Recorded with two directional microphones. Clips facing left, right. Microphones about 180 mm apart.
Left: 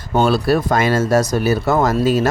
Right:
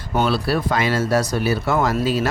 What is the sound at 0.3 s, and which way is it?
A man's voice, 45° left (ahead or behind).